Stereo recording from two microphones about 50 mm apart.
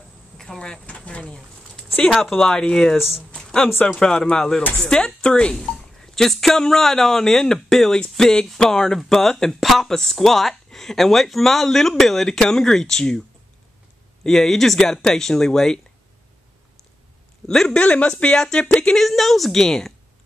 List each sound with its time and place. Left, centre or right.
0.4 s a sound: centre
2.0 s speech: centre
3.3 s a sound: centre
3.8 s speech: centre
14.2 s speech: centre
17.5 s speech: centre
17.8 s speech: left
18.9 s a woman's voice: centre